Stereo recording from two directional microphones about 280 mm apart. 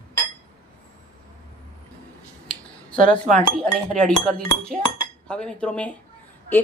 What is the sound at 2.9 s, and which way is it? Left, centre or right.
Speech, right.